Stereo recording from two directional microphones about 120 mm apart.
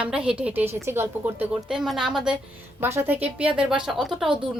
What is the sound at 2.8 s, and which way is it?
A woman's voice, 20° right (ahead or behind).